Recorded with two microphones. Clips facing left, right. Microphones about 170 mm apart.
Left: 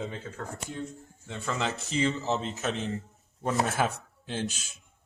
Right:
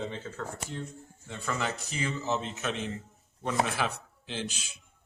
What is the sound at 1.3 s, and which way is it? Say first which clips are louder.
A man's voice: left 1 dB; 25° left (ahead or behind).